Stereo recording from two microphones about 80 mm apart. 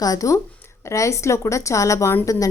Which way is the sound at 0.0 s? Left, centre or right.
Left.